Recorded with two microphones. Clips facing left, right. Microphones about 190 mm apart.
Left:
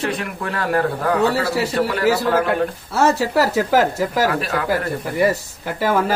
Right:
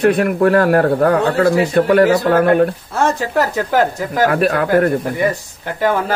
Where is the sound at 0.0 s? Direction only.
55° right (ahead or behind).